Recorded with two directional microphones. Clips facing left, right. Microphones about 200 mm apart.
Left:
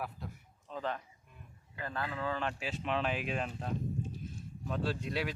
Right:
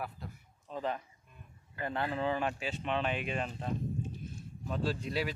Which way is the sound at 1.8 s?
25° right (ahead or behind).